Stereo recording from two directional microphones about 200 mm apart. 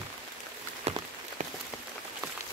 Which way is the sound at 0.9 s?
30° right (ahead or behind).